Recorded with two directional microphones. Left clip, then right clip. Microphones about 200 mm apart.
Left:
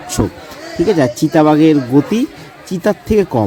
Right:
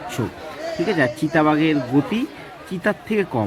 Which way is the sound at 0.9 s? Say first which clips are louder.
Left 5 dB; 40° left (ahead or behind).